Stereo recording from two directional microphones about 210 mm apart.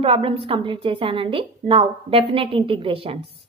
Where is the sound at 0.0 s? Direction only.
25° right (ahead or behind).